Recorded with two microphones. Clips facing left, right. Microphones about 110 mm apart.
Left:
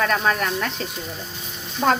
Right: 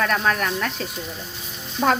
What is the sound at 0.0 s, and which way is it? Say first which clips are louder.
Speech: even; centre (ahead or behind).